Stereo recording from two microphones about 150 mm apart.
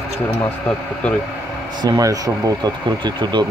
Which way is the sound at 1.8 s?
25° right (ahead or behind).